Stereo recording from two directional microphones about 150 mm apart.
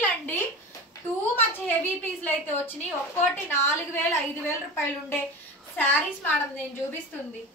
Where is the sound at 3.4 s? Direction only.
15° left (ahead or behind).